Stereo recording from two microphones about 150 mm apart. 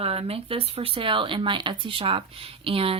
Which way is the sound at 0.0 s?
40° right (ahead or behind).